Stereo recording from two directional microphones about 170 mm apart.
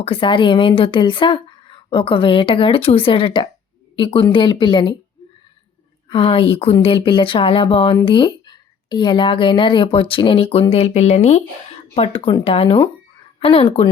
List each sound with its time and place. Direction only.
0.0 s a woman's voice: 30° left (ahead or behind)
6.1 s a woman's voice: 30° left (ahead or behind)